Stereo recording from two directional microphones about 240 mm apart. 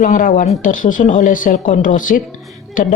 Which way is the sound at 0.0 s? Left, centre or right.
Left.